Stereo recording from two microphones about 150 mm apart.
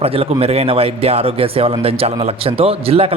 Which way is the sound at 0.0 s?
40° right (ahead or behind).